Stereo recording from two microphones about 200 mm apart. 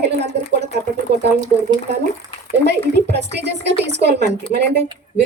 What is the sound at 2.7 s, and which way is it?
Speech, 55° right (ahead or behind).